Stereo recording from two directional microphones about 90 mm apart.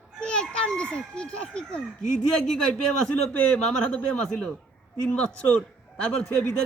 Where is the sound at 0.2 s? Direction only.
10° left (ahead or behind).